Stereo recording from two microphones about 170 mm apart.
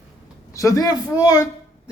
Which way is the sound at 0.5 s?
20° left (ahead or behind).